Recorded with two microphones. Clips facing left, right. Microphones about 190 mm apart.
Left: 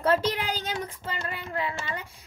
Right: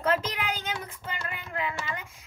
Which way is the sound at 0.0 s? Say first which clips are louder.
Left 3 dB; 35° left (ahead or behind).